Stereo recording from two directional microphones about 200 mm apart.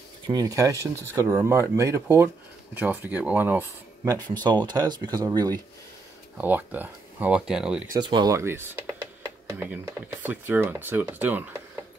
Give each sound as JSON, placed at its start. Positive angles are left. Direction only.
{"t": 0.3, "sound": "speech", "side_deg": -20}
{"t": 7.9, "sound": "speech", "side_deg": -20}